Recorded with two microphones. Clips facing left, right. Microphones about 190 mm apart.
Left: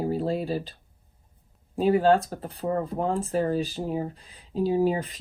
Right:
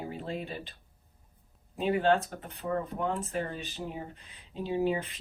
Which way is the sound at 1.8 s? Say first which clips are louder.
Left 6 dB; 35° left (ahead or behind).